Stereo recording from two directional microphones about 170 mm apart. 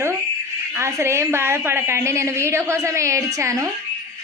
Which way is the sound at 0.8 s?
15° right (ahead or behind).